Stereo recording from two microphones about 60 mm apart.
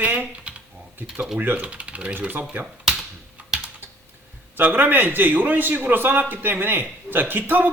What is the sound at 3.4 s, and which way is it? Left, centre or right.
Typing, right.